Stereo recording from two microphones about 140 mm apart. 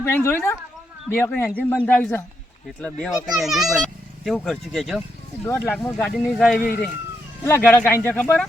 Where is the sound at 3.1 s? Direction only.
5° right (ahead or behind).